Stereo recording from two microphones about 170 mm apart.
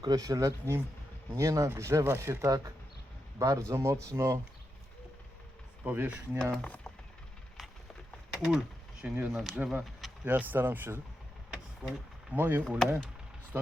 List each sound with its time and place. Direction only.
0.0 s speech: 20° right (ahead or behind)
5.8 s speech: 10° right (ahead or behind)
6.4 s speech: 5° left (ahead or behind)
8.4 s speech: 5° right (ahead or behind)